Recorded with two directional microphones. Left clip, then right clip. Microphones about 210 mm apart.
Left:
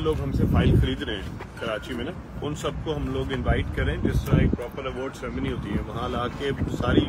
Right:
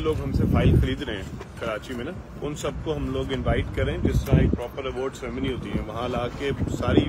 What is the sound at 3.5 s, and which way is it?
Speech, 30° right (ahead or behind).